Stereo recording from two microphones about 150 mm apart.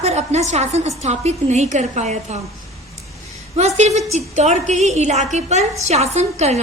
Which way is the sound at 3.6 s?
45° right (ahead or behind).